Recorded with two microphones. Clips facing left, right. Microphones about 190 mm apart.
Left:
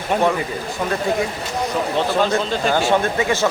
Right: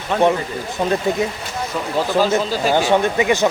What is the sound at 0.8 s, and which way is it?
Speech, 25° right (ahead or behind).